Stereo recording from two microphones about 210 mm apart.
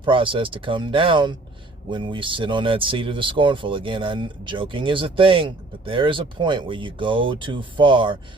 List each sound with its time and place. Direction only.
0.0 s speech: 25° right (ahead or behind)